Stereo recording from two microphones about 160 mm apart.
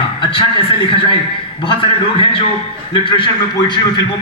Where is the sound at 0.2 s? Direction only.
35° left (ahead or behind).